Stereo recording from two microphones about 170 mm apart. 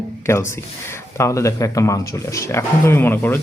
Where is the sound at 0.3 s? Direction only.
15° left (ahead or behind).